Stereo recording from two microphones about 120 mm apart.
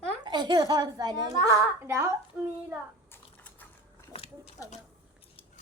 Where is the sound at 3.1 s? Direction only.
15° left (ahead or behind).